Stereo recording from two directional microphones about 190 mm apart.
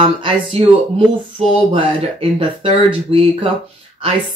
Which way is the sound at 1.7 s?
30° right (ahead or behind).